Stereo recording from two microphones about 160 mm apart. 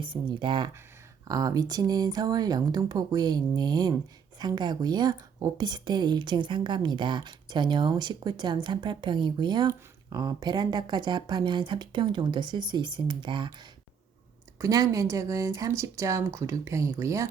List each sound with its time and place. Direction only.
0.0 s speech: 30° right (ahead or behind)
14.6 s speech: 20° right (ahead or behind)